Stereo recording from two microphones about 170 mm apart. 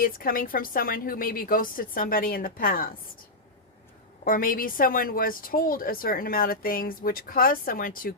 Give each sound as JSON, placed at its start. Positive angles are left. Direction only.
{"t": 0.0, "sound": "a woman's voice", "side_deg": 55}
{"t": 4.2, "sound": "a woman's voice", "side_deg": 55}